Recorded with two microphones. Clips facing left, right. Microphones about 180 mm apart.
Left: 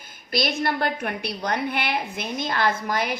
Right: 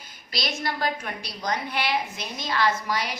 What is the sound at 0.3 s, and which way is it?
A woman's voice, 55° left (ahead or behind).